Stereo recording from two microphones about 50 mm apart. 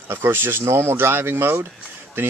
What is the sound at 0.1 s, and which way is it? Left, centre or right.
Speech, right.